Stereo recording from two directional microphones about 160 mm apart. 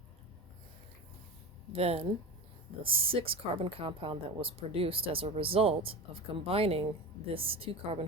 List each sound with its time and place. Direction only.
1.7 s a woman's voice: 40° right (ahead or behind)